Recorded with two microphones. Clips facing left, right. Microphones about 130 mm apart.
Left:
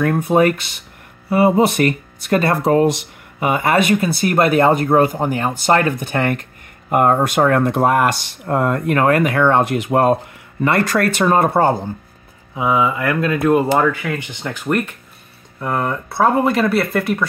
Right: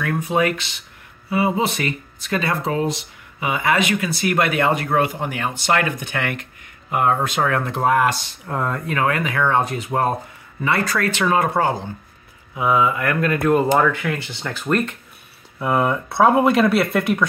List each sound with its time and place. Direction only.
0.0 s speech: 45° left (ahead or behind); by 10.1 s 70° left (ahead or behind)
11.2 s speech: 45° left (ahead or behind)
12.5 s speech: 20° left (ahead or behind)
13.7 s speech: 5° left (ahead or behind)
14.1 s speech: 15° left (ahead or behind)
15.6 s speech: 5° right (ahead or behind)